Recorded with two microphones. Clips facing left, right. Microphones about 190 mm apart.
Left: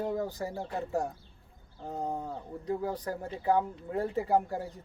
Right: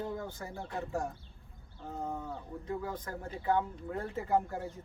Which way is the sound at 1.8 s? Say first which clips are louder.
Left 4 dB; 35° left (ahead or behind).